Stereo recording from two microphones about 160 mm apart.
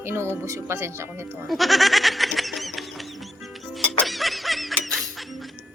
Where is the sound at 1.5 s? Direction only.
Centre (ahead or behind).